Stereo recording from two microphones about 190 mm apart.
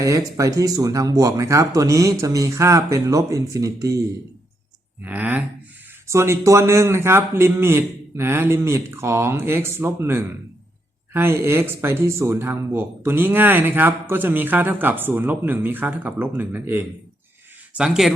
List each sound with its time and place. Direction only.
0.0 s speech: 15° right (ahead or behind)
5.0 s speech: 10° right (ahead or behind)